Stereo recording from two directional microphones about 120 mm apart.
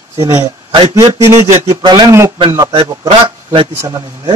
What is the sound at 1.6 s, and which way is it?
Speech, 25° right (ahead or behind).